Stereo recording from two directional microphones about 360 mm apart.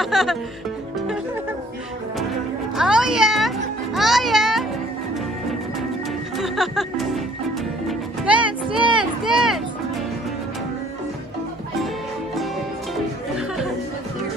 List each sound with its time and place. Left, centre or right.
0.0 s music: centre
2.7 s a child's voice: centre
6.3 s music: centre
8.3 s music: centre
8.7 s speech: centre